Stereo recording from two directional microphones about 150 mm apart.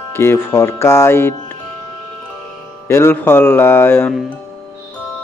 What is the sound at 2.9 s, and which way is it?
Speech, 15° left (ahead or behind).